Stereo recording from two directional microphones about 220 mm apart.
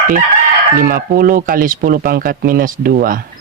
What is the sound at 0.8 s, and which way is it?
Speech, 40° right (ahead or behind).